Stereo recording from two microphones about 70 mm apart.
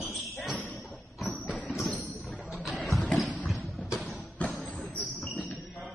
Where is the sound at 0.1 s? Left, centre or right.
Centre.